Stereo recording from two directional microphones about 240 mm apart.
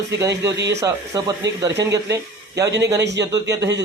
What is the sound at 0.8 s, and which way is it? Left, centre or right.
Speech, centre.